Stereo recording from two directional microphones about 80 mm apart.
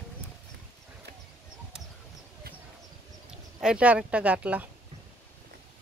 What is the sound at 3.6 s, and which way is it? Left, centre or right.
Speech, centre.